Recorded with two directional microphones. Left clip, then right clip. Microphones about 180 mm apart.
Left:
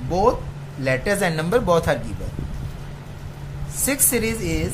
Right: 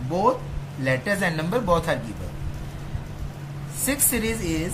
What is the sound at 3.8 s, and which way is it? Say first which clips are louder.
Speech: left 3 dB; 50° left (ahead or behind).